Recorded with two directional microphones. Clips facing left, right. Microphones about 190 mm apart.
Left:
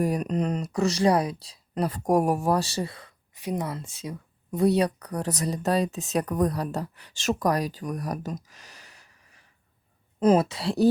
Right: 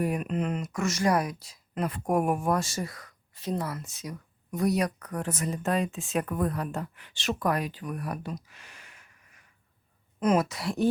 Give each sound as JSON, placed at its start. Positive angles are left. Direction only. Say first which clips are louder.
{"t": 0.0, "sound": "speech", "louder": "left 3 dB", "side_deg": 40}
{"t": 3.3, "sound": "speech", "louder": "left 2 dB", "side_deg": 15}
{"t": 10.2, "sound": "speech", "louder": "left 4 dB", "side_deg": 30}